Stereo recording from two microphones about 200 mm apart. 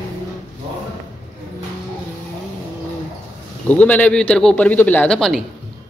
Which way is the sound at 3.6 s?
10° left (ahead or behind).